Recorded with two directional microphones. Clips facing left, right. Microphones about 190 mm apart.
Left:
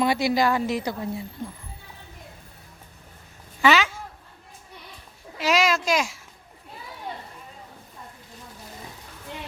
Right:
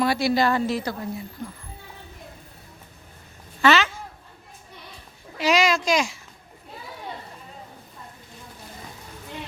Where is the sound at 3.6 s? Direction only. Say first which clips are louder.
Right 1 dB; 10° left (ahead or behind).